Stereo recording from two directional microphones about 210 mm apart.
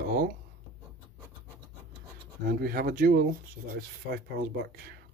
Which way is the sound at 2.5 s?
45° right (ahead or behind).